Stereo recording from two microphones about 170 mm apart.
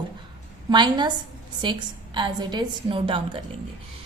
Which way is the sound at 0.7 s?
25° right (ahead or behind).